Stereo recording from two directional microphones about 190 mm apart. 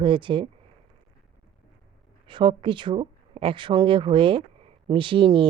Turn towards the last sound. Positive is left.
turn(degrees=-25)  # may be behind; listen again after turning